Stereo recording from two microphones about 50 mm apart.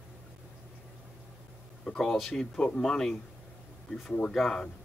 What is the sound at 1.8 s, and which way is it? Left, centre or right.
Speech, centre.